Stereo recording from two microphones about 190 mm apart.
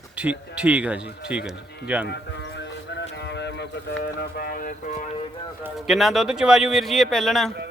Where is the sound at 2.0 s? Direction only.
65° left (ahead or behind); by 5.1 s 40° left (ahead or behind).